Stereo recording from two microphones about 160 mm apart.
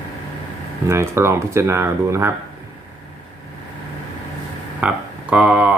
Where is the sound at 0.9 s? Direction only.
15° right (ahead or behind).